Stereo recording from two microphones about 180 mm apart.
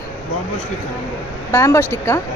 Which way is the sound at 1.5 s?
15° left (ahead or behind).